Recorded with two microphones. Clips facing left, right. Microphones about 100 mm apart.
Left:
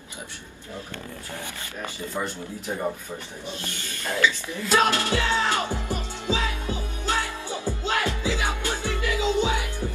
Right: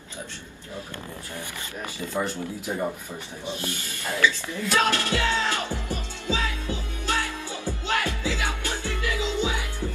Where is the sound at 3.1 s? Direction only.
10° left (ahead or behind).